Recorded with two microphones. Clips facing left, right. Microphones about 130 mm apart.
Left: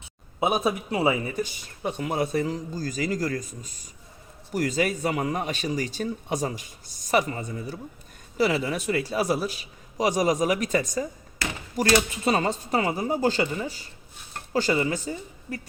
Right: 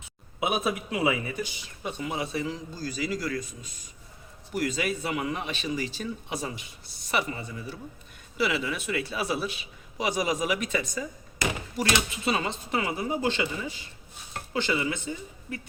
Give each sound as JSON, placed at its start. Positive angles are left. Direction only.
{"t": 0.3, "sound": "speech", "side_deg": 35}
{"t": 11.4, "sound": "basketball bounce", "side_deg": -15}
{"t": 12.2, "sound": "speech", "side_deg": 45}